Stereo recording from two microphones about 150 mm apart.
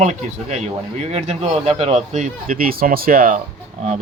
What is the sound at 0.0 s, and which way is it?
Speech, 50° right (ahead or behind).